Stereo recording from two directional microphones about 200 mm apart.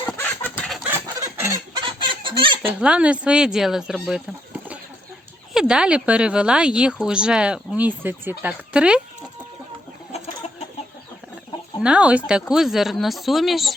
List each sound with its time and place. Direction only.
0.0 s chicken: 10° left (ahead or behind)
1.0 s fowl: 15° right (ahead or behind)
1.8 s fowl: 25° right (ahead or behind)
2.6 s speech: 5° right (ahead or behind)
5.5 s speech: 5° right (ahead or behind)
11.8 s speech: 5° right (ahead or behind)